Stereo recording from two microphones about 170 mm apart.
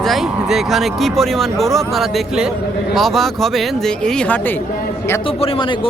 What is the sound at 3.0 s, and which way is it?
Speech, centre (ahead or behind).